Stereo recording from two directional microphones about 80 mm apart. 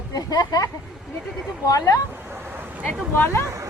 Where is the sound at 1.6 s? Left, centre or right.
Left.